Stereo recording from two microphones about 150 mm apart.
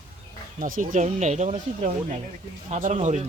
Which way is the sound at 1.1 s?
50° right (ahead or behind).